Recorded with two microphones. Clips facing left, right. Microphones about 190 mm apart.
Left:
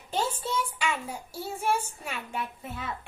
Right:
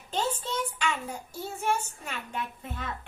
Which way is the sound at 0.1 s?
10° left (ahead or behind).